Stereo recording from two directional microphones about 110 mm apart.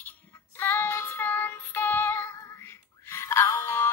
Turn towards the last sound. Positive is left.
turn(degrees=25)  # may be behind; listen again after turning